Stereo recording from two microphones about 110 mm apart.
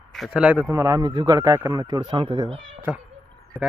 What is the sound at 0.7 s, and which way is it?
A man's voice, 35° right (ahead or behind).